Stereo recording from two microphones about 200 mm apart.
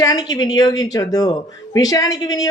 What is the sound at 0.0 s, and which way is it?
A woman's voice, 20° left (ahead or behind).